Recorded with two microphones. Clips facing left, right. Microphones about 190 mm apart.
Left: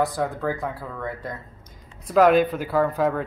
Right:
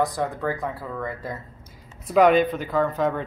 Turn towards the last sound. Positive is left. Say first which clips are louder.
# left 1 dB
turn(degrees=5)  # may be behind; listen again after turning